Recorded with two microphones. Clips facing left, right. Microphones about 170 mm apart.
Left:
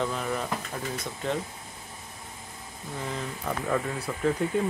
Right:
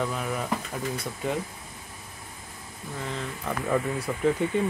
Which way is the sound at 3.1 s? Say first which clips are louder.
Even; 5° left (ahead or behind).